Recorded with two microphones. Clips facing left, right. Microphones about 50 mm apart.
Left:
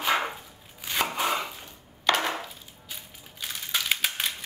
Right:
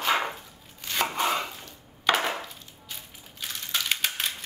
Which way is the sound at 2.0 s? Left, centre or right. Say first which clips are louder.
Even; centre.